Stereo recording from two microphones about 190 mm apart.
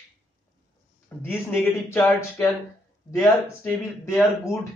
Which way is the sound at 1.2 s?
10° left (ahead or behind).